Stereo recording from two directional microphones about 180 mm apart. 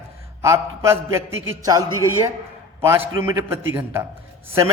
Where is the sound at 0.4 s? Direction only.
15° right (ahead or behind).